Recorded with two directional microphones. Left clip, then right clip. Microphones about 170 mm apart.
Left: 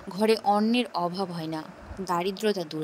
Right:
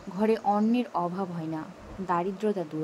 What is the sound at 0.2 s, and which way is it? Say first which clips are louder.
A woman's voice: left 2 dB; 55° left (ahead or behind).